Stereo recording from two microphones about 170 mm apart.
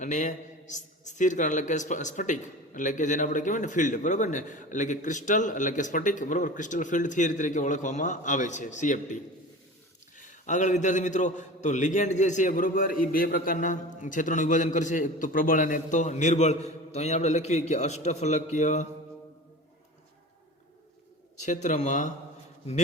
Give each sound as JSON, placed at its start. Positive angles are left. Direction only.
{"t": 0.0, "sound": "a man's voice", "side_deg": 45}
{"t": 10.2, "sound": "a man's voice", "side_deg": 45}
{"t": 21.4, "sound": "a man's voice", "side_deg": 45}